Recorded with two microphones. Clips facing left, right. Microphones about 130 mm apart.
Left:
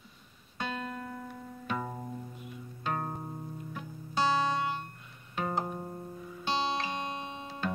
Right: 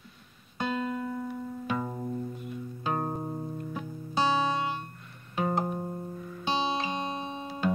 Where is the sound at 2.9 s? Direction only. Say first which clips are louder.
Right 4 dB; 25° right (ahead or behind).